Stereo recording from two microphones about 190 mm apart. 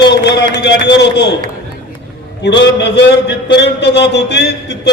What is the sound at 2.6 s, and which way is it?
A man's voice, 65° left (ahead or behind).